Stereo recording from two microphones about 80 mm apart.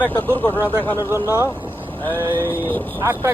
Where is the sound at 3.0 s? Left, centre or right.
Right.